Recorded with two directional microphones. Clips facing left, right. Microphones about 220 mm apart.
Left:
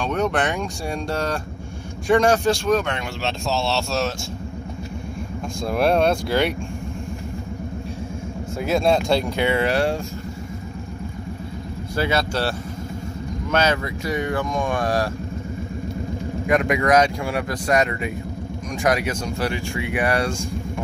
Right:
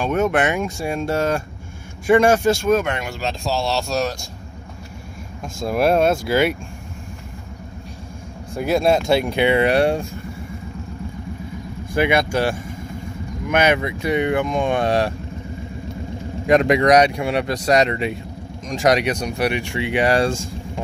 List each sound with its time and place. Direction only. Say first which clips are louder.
0.0 s speech: right 3 dB; 5° right (ahead or behind)
3.7 s speech: right 1 dB; 15° right (ahead or behind)
5.7 s speech: right 2 dB; 5° right (ahead or behind)
8.5 s speech: right 2 dB; centre (ahead or behind); by 10.0 s 20° right (ahead or behind)
11.9 s speech: right 4 dB; 15° right (ahead or behind)
16.4 s speech: right 5 dB; 30° right (ahead or behind)
16.8 s speech: right 3 dB; 20° right (ahead or behind)
19.3 s speech: right 3 dB; 20° right (ahead or behind)